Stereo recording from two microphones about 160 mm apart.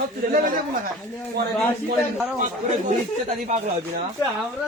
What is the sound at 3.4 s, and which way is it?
Speech, 45° right (ahead or behind).